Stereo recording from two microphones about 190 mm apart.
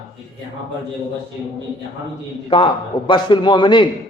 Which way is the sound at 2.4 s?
25° left (ahead or behind).